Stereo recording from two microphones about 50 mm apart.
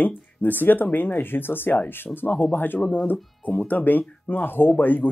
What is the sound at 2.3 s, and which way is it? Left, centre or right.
Speech, left.